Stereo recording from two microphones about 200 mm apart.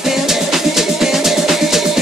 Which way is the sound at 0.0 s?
Centre (ahead or behind).